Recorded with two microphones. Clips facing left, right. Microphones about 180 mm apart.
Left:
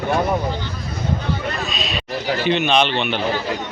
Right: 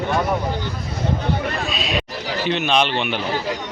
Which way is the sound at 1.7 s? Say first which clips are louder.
Right 1 dB; 10° right (ahead or behind).